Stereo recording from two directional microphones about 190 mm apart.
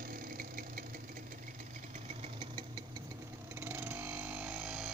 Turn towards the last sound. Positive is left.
turn(degrees=-5)  # may be behind; listen again after turning